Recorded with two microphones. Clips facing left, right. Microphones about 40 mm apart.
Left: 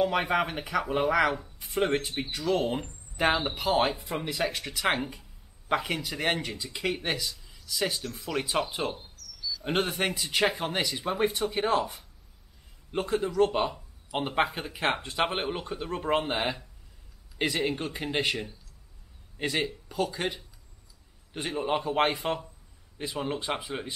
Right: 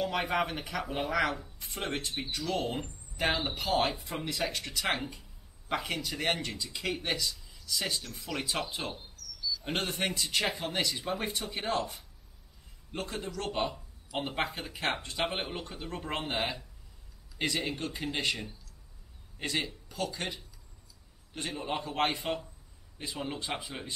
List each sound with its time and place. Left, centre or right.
0.0 s speech: centre